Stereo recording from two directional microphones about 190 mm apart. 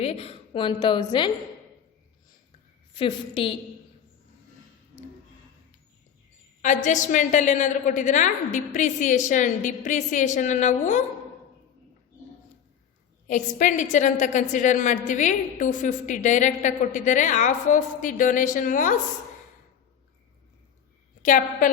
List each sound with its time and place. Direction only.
0.0 s a woman's voice: 30° left (ahead or behind)
2.9 s a woman's voice: 30° left (ahead or behind)
6.6 s a woman's voice: 40° left (ahead or behind)
13.2 s a woman's voice: 40° left (ahead or behind)
21.2 s a woman's voice: 45° left (ahead or behind)